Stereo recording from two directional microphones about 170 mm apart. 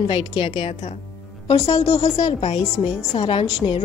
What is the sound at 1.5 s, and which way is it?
Speech, 20° left (ahead or behind).